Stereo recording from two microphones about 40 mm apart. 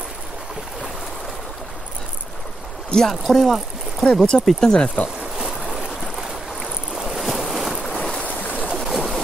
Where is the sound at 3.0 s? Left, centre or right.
Centre.